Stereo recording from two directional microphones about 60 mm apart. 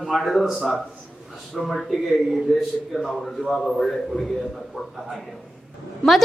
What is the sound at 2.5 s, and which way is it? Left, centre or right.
Speech, centre.